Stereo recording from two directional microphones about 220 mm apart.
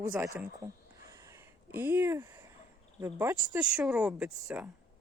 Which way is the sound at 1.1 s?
15° right (ahead or behind).